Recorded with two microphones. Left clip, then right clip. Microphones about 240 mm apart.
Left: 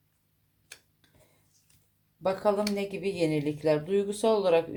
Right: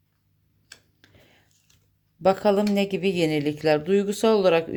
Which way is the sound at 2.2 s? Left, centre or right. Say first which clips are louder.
Right 6 dB; right.